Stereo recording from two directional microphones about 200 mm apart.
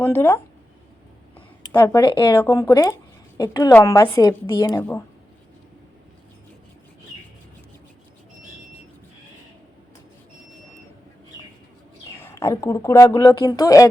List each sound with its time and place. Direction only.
0.0 s speech: 10° left (ahead or behind)
1.7 s speech: 10° left (ahead or behind)
2.0 s a woman's voice: 25° left (ahead or behind)
12.2 s speech: 15° left (ahead or behind)